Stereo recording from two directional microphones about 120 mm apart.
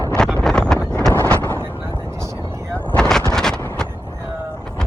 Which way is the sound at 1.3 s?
15° left (ahead or behind).